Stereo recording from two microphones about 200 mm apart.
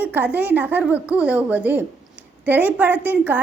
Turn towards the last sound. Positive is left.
turn(degrees=-10)  # may be behind; listen again after turning